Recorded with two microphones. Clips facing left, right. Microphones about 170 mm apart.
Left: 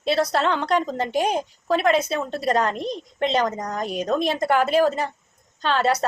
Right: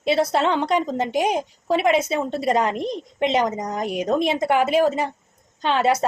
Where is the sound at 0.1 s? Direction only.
25° right (ahead or behind).